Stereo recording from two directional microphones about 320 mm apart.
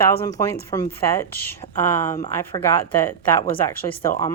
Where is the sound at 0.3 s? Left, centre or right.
Centre.